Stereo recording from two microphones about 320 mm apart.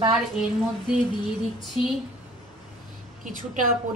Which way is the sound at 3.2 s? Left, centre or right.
Right.